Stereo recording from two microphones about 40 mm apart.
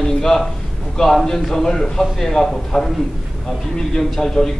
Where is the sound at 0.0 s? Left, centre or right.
Centre.